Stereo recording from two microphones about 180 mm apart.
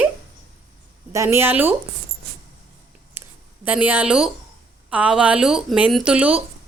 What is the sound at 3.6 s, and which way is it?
Speech, 10° right (ahead or behind).